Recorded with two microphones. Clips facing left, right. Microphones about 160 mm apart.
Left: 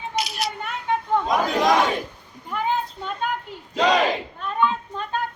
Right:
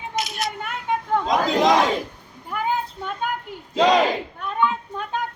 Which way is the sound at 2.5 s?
10° right (ahead or behind).